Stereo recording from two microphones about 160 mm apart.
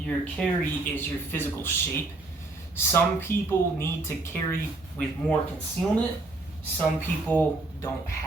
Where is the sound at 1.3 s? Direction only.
15° left (ahead or behind).